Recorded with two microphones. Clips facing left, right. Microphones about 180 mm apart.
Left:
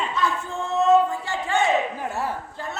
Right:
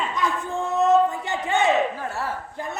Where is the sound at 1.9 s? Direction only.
15° left (ahead or behind).